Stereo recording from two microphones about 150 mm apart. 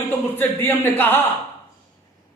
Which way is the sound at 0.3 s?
15° left (ahead or behind).